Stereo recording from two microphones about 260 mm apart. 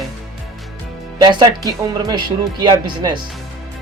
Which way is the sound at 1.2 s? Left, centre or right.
Centre.